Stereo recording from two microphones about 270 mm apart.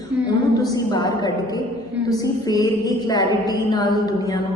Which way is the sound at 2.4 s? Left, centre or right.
Centre.